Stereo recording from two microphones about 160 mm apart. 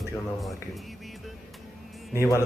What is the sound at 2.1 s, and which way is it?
Speech, 20° left (ahead or behind).